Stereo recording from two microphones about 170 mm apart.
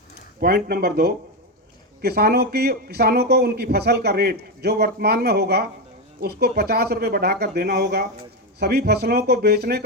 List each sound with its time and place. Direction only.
0.3 s speech: 65° right (ahead or behind)